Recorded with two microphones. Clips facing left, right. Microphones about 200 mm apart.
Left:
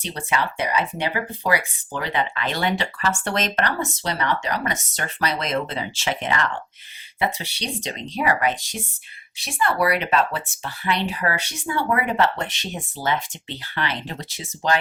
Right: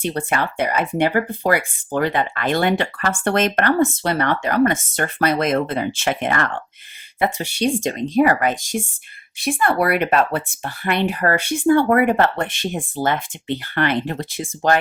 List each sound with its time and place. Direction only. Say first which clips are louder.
0.0 s speech: right 4 dB; 50° right (ahead or behind)